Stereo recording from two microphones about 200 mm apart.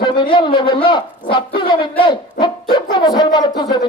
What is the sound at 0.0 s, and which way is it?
Speech, 25° left (ahead or behind).